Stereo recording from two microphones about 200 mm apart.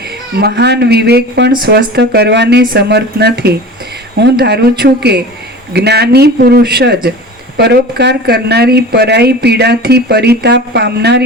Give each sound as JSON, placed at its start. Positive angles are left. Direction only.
{"t": 0.3, "sound": "speech", "side_deg": -55}